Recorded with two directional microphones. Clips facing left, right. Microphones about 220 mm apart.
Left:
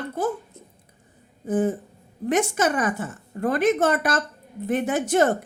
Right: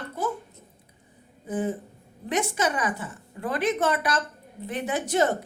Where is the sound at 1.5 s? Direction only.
45° left (ahead or behind).